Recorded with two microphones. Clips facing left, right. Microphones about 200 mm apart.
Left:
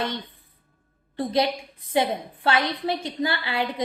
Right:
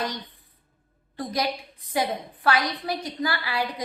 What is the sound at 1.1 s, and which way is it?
A woman's voice, 25° left (ahead or behind).